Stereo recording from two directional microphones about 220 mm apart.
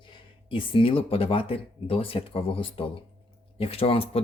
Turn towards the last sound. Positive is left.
turn(degrees=25)  # may be behind; listen again after turning